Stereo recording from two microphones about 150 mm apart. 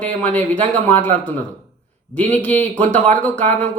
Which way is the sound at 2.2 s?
10° left (ahead or behind).